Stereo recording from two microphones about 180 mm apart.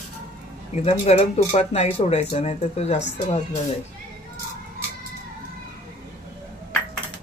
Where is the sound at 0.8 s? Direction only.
35° left (ahead or behind).